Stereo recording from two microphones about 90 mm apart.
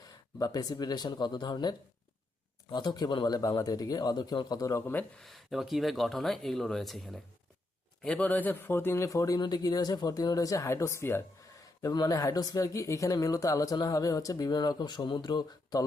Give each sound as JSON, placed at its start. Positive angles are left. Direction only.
{"t": 0.3, "sound": "speech", "side_deg": 45}
{"t": 5.1, "sound": "speech", "side_deg": 0}
{"t": 8.0, "sound": "a man's voice", "side_deg": 15}
{"t": 11.8, "sound": "speech", "side_deg": 45}